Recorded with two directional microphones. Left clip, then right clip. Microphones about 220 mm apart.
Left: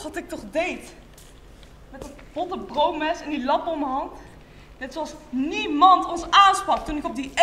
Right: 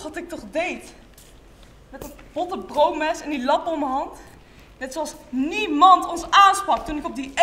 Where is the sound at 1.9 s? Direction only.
10° right (ahead or behind).